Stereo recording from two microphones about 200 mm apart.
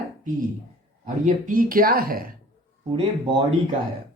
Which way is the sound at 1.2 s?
40° right (ahead or behind).